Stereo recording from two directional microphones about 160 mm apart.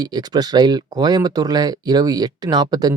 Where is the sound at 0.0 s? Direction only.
25° right (ahead or behind).